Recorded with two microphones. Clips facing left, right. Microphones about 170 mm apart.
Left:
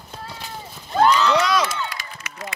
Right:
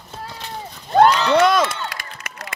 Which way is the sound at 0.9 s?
60° right (ahead or behind).